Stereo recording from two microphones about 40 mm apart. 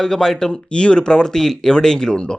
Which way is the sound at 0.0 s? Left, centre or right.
Centre.